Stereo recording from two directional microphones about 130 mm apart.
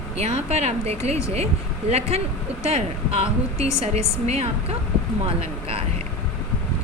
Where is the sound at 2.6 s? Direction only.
50° right (ahead or behind).